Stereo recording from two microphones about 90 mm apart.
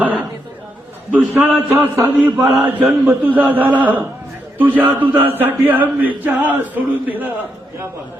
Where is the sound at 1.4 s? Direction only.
20° right (ahead or behind).